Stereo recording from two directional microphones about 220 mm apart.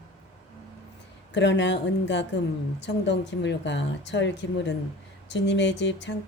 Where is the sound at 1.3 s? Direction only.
55° left (ahead or behind).